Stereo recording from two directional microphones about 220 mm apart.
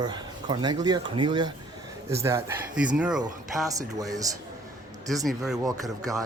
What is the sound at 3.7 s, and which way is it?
Speech, 15° right (ahead or behind).